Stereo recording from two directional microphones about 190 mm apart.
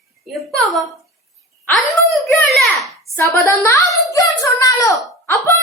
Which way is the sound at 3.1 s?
15° left (ahead or behind).